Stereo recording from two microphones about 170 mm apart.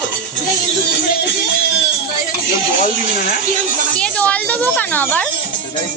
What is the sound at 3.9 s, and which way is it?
A woman's voice, 5° left (ahead or behind).